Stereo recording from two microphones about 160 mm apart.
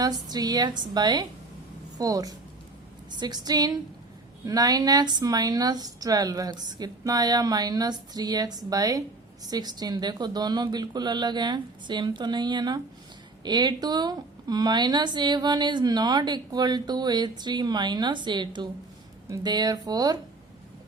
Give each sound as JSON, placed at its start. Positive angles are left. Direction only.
{"t": 0.0, "sound": "speech", "side_deg": -25}